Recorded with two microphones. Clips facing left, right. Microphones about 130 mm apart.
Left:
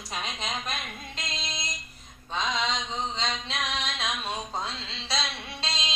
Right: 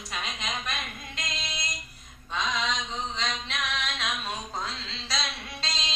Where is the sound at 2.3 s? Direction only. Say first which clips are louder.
Left 1 dB; 30° left (ahead or behind).